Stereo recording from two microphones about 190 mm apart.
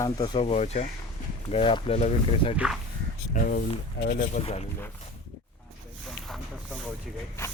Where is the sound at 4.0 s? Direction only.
65° left (ahead or behind).